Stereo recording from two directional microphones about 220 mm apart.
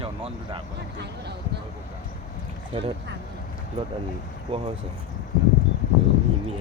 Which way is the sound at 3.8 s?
25° right (ahead or behind).